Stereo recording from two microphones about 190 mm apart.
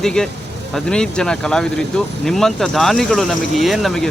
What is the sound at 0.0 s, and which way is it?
Speech, 5° left (ahead or behind).